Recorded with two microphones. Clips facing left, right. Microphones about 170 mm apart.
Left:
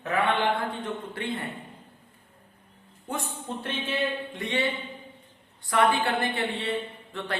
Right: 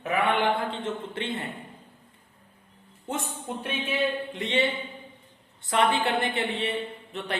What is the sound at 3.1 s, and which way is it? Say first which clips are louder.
Speech: right 1 dB; 20° right (ahead or behind).